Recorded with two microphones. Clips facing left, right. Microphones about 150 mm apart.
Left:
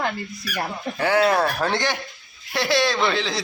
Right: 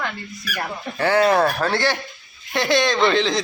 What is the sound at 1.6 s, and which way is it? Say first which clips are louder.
Speech: right 2 dB; 15° left (ahead or behind).